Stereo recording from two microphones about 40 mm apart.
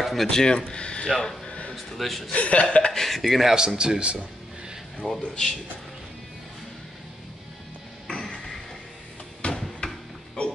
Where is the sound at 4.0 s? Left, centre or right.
Right.